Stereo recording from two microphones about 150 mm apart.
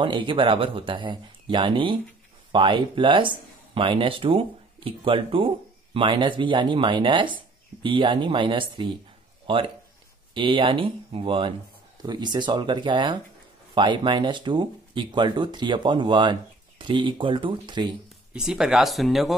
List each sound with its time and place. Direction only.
0.0 s speech: 35° right (ahead or behind)
18.3 s speech: 5° right (ahead or behind)